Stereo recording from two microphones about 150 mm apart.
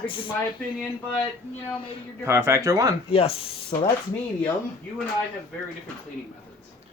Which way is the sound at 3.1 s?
40° left (ahead or behind).